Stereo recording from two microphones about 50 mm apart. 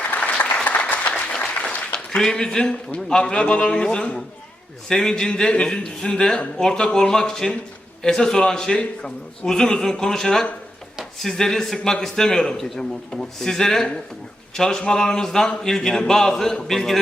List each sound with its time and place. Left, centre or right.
0.3 s applause: left
4.9 s a man's voice: centre